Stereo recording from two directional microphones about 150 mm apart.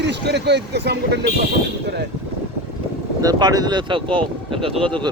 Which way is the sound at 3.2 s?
25° right (ahead or behind).